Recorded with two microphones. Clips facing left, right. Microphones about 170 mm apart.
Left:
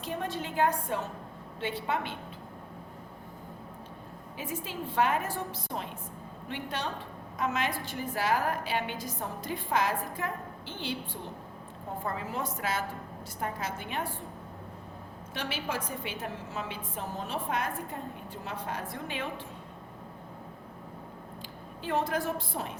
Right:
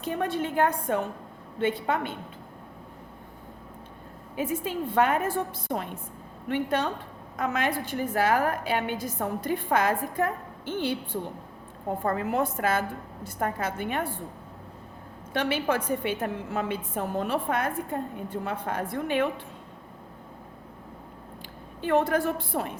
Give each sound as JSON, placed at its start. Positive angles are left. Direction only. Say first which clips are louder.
{"t": 0.0, "sound": "a woman's voice", "louder": "right 6 dB", "side_deg": -55}
{"t": 4.4, "sound": "a woman's voice", "louder": "right 8 dB", "side_deg": -55}
{"t": 15.3, "sound": "a woman's voice", "louder": "right 9 dB", "side_deg": -55}
{"t": 21.8, "sound": "a woman's voice", "louder": "right 7 dB", "side_deg": -55}